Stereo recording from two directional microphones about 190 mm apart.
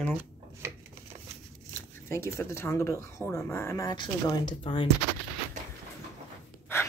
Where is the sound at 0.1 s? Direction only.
10° right (ahead or behind).